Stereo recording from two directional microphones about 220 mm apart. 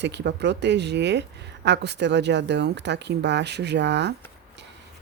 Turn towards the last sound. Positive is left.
turn(degrees=-50)  # may be behind; listen again after turning